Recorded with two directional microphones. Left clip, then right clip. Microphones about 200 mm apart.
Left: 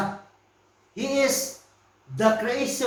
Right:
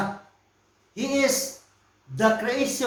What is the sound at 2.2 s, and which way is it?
Speech, 50° right (ahead or behind).